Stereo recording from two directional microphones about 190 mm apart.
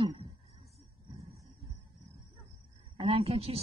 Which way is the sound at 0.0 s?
30° right (ahead or behind).